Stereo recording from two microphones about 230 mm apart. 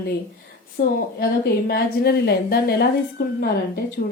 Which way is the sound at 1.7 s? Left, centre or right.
Left.